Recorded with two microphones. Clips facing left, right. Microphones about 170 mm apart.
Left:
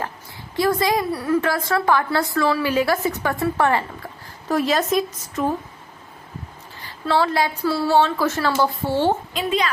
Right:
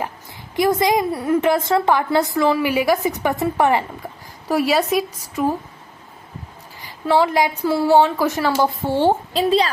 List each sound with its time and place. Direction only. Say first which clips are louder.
0.5 s a woman's voice: right 2 dB; 20° right (ahead or behind)
6.8 s a woman's voice: right 3 dB; 15° right (ahead or behind)
9.3 s a woman's voice: right 5 dB; 35° right (ahead or behind)